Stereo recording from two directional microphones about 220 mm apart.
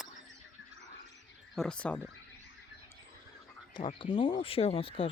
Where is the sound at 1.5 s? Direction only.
5° left (ahead or behind).